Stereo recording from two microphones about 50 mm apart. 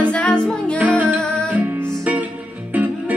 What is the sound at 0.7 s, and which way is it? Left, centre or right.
Music, right.